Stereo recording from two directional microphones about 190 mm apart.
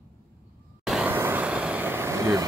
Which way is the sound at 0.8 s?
5° right (ahead or behind).